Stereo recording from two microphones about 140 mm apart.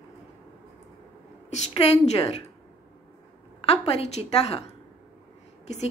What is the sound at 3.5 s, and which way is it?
A woman's voice, 45° left (ahead or behind).